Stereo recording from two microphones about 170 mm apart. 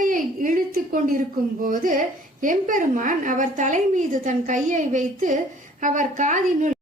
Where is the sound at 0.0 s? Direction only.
55° right (ahead or behind).